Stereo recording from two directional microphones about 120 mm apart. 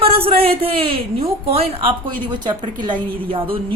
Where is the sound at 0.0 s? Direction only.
50° right (ahead or behind).